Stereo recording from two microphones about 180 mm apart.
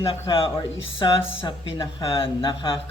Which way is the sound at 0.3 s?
30° left (ahead or behind).